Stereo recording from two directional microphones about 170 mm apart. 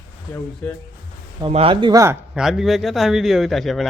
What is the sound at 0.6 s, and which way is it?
Speech, 15° left (ahead or behind).